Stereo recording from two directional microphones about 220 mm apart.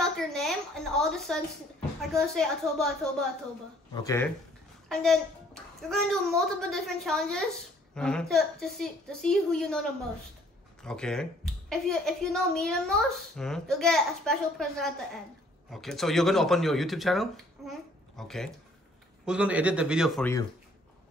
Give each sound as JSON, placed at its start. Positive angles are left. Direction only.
{"t": 0.0, "sound": "a sound", "side_deg": 0}
{"t": 2.0, "sound": "speech", "side_deg": 0}
{"t": 3.9, "sound": "speech", "side_deg": 15}
{"t": 4.8, "sound": "a child's voice", "side_deg": 0}
{"t": 10.8, "sound": "speech", "side_deg": 5}